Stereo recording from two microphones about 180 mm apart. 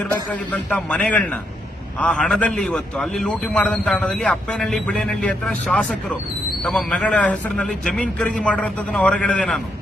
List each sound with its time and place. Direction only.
0.5 s a man's voice: 5° left (ahead or behind)